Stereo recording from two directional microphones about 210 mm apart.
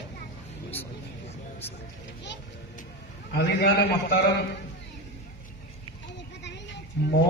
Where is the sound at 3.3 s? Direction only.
55° left (ahead or behind).